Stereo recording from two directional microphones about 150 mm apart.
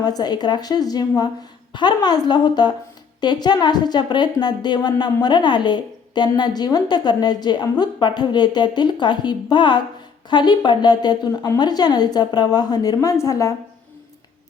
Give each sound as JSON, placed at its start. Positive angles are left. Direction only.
{"t": 0.0, "sound": "speech", "side_deg": 25}